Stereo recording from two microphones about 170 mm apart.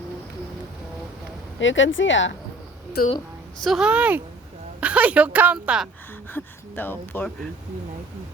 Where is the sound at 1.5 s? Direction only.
90° left.